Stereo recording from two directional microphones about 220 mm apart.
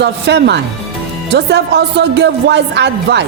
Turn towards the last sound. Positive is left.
turn(degrees=-50)  # may be behind; listen again after turning